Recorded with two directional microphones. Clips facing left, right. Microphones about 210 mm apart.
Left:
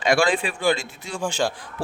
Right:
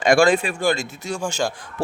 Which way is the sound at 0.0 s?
45° right (ahead or behind).